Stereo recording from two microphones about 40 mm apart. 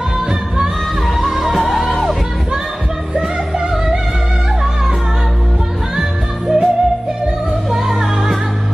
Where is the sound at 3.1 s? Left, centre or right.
Centre.